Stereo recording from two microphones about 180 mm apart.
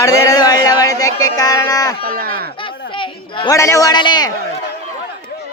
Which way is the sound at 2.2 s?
60° right (ahead or behind).